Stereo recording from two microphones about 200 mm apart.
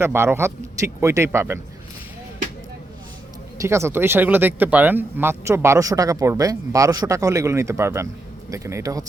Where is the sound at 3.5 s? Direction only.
15° right (ahead or behind).